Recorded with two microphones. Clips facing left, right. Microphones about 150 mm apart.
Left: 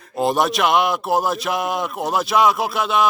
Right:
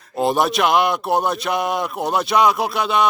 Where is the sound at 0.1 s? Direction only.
Centre (ahead or behind).